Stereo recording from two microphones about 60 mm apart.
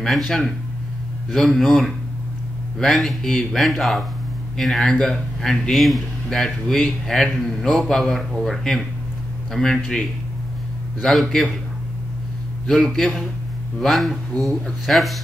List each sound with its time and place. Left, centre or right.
0.0 s speech: centre
11.0 s speech: centre
12.6 s speech: centre